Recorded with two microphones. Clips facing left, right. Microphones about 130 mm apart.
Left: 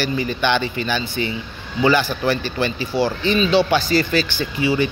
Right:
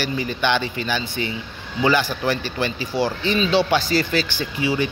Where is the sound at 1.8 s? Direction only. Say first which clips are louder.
Left 2 dB; 15° right (ahead or behind).